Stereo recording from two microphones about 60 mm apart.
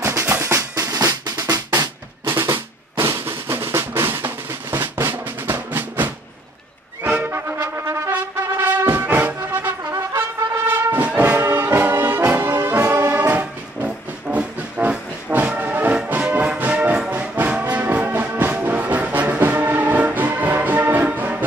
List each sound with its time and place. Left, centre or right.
0.0 s percussion: right
0.4 s drum: right
3.0 s drum: right
7.0 s music: right
7.5 s brass instrument: right
8.1 s music: right
10.5 s brass instrument: right
13.1 s music: right
14.3 s music: right
16.2 s music: centre